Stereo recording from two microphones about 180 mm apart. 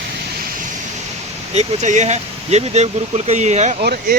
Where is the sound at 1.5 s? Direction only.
40° right (ahead or behind).